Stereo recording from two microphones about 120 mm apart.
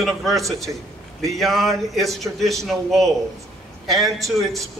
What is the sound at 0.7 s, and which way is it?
Speech, 25° right (ahead or behind).